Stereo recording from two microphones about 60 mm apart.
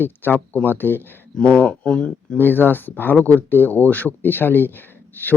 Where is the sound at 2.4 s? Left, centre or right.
Left.